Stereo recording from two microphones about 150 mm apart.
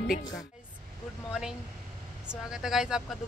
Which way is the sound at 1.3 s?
5° right (ahead or behind).